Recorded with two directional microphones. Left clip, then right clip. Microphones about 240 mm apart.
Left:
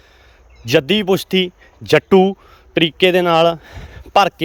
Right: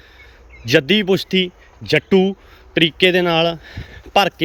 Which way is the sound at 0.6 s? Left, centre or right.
Centre.